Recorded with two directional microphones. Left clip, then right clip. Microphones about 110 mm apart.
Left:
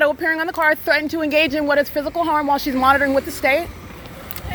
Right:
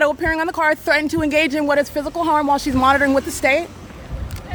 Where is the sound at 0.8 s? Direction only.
45° right (ahead or behind).